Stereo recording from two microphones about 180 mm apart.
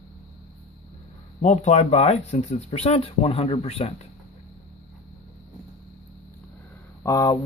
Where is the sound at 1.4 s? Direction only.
40° left (ahead or behind).